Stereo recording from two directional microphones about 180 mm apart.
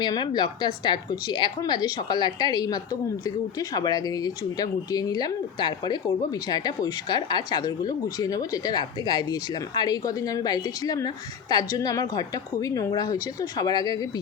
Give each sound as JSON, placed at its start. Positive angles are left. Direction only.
{"t": 0.0, "sound": "speech", "side_deg": 25}